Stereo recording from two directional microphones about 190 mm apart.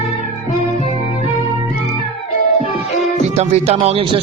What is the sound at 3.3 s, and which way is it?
Speech, 30° right (ahead or behind).